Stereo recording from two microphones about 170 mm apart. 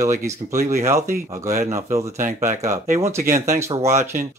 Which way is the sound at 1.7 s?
15° right (ahead or behind).